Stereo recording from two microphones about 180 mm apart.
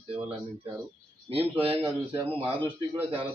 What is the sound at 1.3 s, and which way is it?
Speech, 30° right (ahead or behind).